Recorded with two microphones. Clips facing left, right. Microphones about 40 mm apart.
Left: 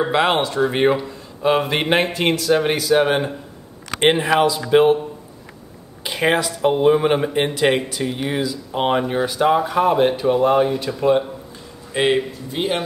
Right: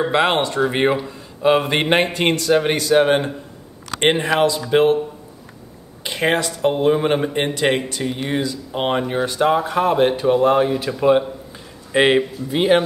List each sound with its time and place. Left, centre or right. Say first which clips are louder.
0.0 s speech: even; centre
6.0 s a man's voice: left 1 dB; centre